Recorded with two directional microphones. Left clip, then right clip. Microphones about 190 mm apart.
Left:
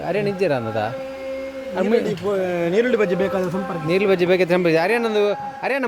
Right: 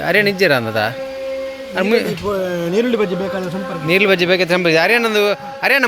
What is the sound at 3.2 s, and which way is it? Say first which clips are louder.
Speech: even; centre (ahead or behind).